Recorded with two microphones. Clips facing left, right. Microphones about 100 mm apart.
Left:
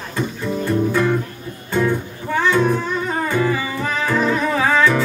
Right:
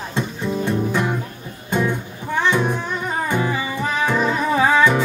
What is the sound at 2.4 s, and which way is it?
Music, 15° right (ahead or behind).